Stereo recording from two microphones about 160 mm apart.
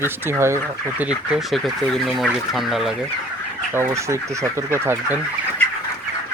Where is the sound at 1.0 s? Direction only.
5° right (ahead or behind).